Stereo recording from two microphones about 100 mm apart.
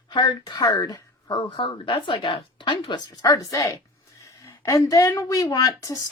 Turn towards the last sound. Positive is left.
turn(degrees=35)  # may be behind; listen again after turning